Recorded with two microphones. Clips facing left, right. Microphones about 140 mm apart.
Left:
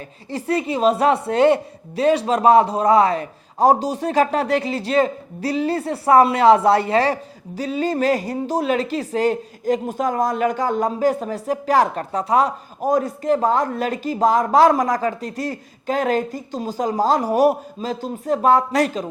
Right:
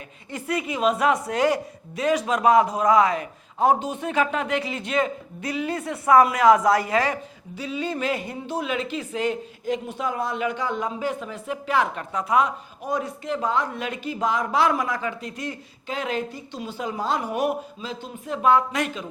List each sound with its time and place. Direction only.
0.3 s a woman's voice: 35° left (ahead or behind)